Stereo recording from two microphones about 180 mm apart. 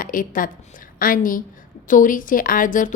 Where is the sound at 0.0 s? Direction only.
50° left (ahead or behind).